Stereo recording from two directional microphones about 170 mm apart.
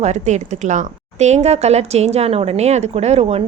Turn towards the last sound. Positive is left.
turn(degrees=-35)  # may be behind; listen again after turning